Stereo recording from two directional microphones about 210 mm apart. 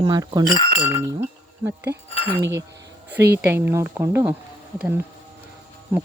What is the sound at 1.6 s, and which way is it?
Speech, 10° right (ahead or behind).